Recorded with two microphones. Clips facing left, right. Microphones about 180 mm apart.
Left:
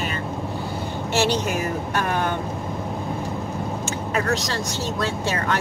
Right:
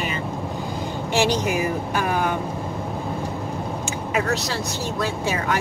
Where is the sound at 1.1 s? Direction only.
15° right (ahead or behind).